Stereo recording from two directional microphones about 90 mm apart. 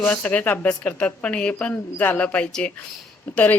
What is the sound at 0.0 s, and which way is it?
A woman's voice, 15° left (ahead or behind).